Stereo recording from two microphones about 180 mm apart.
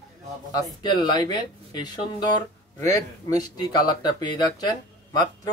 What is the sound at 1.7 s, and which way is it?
Speech, 25° left (ahead or behind).